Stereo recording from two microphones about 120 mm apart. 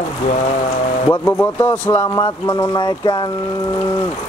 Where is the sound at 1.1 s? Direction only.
15° left (ahead or behind).